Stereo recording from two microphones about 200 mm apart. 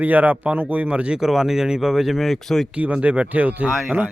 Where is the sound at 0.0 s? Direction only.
10° right (ahead or behind).